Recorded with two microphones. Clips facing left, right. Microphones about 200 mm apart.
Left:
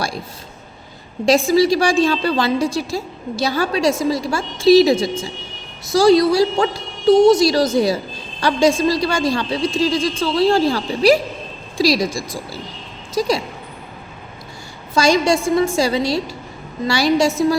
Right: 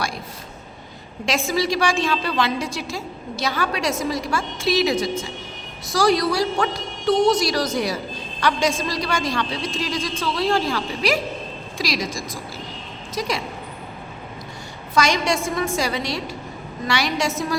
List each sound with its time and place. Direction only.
1.5 s a woman's voice: 35° left (ahead or behind)
14.9 s a woman's voice: 30° left (ahead or behind)